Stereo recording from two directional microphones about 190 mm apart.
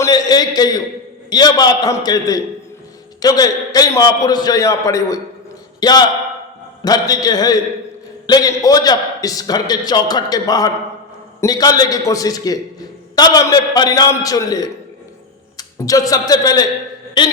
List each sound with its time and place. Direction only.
0.0 s a man's voice: 20° left (ahead or behind)